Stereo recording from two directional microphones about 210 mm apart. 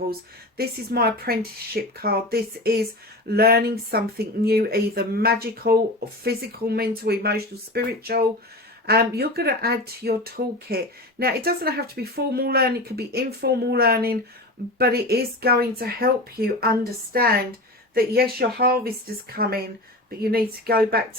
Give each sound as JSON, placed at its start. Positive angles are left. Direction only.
{"t": 0.5, "sound": "speech", "side_deg": -45}